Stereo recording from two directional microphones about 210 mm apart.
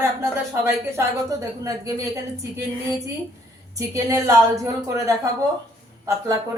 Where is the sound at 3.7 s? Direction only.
15° right (ahead or behind).